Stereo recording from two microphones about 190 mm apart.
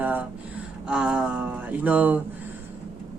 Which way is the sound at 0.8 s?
5° right (ahead or behind).